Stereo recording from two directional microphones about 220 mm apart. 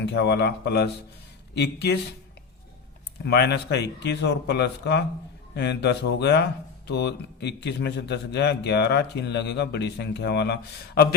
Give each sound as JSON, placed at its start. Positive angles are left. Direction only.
{"t": 0.0, "sound": "speech", "side_deg": 50}
{"t": 3.2, "sound": "speech", "side_deg": 50}